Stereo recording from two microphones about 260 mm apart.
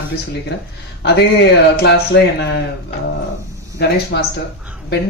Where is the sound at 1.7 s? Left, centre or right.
Left.